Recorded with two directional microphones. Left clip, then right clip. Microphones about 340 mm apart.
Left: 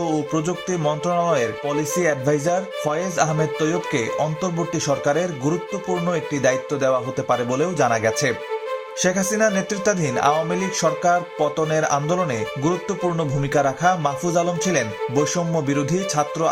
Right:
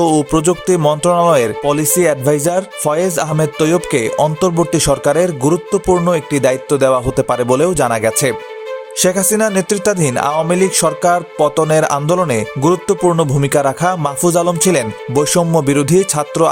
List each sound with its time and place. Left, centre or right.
0.0 s speech: right